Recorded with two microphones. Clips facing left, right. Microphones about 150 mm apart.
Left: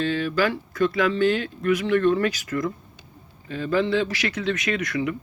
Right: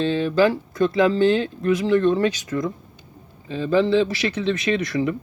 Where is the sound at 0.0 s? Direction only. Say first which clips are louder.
Right 4 dB; 25° right (ahead or behind).